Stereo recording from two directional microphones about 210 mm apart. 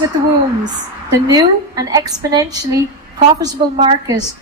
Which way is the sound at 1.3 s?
20° right (ahead or behind).